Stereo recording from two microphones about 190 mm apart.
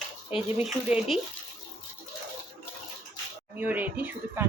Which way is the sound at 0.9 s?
5° right (ahead or behind).